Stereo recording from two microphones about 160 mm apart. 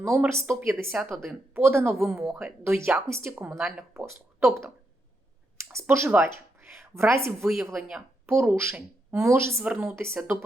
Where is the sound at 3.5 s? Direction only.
Centre (ahead or behind).